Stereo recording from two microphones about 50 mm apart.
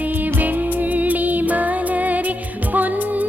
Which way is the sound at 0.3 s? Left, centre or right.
Right.